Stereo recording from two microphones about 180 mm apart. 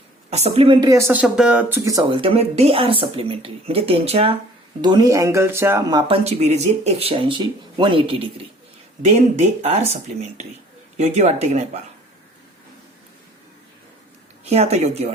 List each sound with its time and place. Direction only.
0.3 s speech: 35° right (ahead or behind)
4.8 s speech: 25° right (ahead or behind)
6.2 s speech: 40° right (ahead or behind)
9.0 s speech: 40° right (ahead or behind)
14.5 s speech: 35° right (ahead or behind)